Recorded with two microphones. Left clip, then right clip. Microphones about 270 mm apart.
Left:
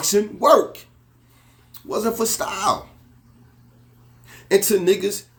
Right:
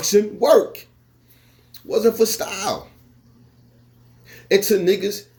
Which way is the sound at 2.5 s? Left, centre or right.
Left.